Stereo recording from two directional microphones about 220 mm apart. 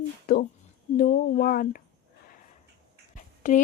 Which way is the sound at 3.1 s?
35° left (ahead or behind).